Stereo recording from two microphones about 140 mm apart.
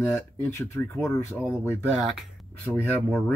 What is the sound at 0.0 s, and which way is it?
Speech, 15° left (ahead or behind).